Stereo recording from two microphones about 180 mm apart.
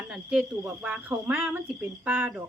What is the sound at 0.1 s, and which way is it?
Speech, 5° right (ahead or behind).